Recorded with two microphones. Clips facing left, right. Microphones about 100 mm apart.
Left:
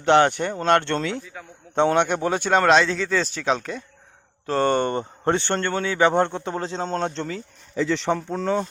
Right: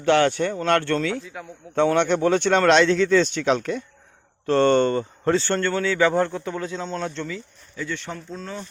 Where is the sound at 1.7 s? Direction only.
20° left (ahead or behind); by 3.8 s centre (ahead or behind).